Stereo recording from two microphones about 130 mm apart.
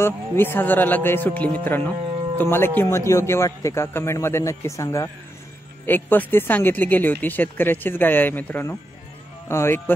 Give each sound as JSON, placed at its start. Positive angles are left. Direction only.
{"t": 0.0, "sound": "speech", "side_deg": 15}